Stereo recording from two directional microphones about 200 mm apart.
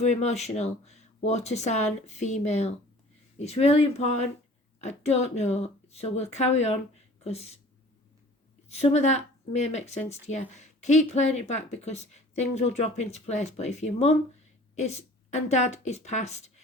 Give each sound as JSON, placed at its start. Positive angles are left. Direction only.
{"t": 0.0, "sound": "speech", "side_deg": 35}
{"t": 8.7, "sound": "speech", "side_deg": 35}